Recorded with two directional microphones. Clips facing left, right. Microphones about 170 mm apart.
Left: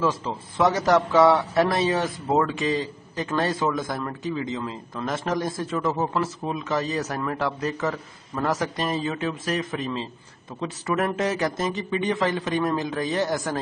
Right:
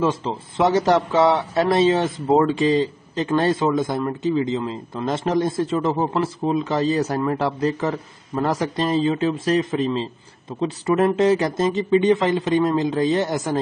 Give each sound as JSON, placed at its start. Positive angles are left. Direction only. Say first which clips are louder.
{"t": 0.0, "sound": "a man's voice", "louder": "right 3 dB", "side_deg": -25}